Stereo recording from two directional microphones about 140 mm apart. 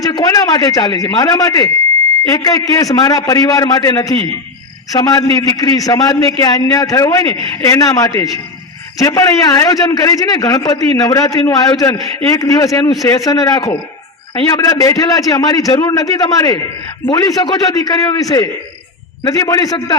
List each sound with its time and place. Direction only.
0.0 s a man's voice: 25° left (ahead or behind)